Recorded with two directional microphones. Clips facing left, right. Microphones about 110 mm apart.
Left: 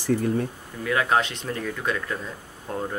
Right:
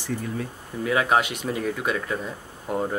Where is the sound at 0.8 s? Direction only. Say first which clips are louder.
Right 1 dB; 10° right (ahead or behind).